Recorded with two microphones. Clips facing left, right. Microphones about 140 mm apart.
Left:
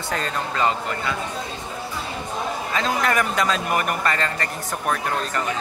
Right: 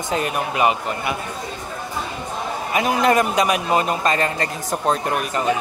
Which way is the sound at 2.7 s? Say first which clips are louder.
Right 6 dB; 20° right (ahead or behind).